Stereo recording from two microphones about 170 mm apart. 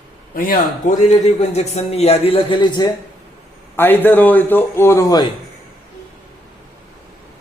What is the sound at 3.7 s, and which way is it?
A man's voice, 10° left (ahead or behind).